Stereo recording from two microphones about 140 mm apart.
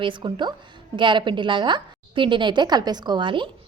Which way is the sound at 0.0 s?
35° right (ahead or behind).